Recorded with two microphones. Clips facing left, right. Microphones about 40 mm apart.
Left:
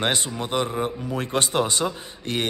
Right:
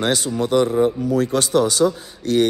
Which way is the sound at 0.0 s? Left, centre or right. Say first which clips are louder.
Right 5 dB; left.